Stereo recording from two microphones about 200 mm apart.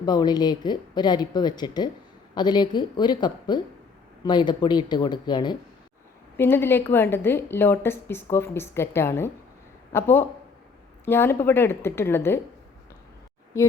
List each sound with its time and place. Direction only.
0.0 s speech: 20° left (ahead or behind)
6.3 s a woman's voice: 10° left (ahead or behind)
13.5 s a woman's voice: 15° left (ahead or behind)